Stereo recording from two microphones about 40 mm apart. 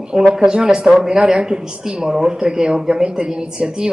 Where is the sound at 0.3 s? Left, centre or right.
Centre.